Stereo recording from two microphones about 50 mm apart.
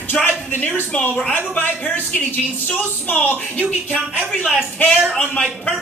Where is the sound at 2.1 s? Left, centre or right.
Left.